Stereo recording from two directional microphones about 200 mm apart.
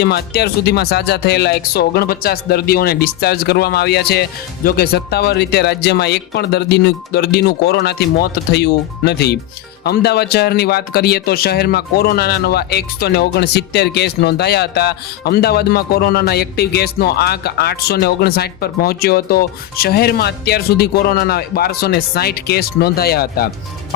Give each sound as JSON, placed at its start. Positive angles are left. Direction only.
{"t": 0.0, "sound": "speech", "side_deg": 55}